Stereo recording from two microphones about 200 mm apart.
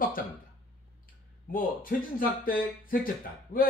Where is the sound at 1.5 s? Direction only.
45° left (ahead or behind).